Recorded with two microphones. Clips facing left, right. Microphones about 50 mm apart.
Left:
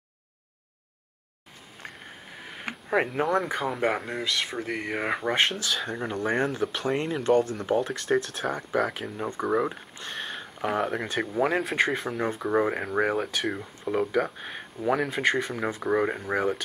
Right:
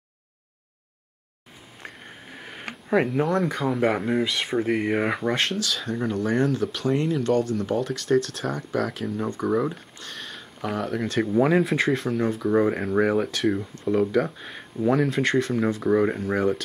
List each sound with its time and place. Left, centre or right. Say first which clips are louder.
1.8 s a sound: right 1 dB; centre
2.7 s a sound: right 3 dB; centre
3.3 s speech: right 3 dB; centre
4.2 s speech: right 5 dB; centre
6.0 s speech: right 4 dB; left
11.3 s speech: right 4 dB; centre